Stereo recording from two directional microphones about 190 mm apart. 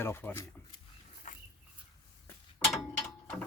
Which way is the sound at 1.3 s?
45° left (ahead or behind).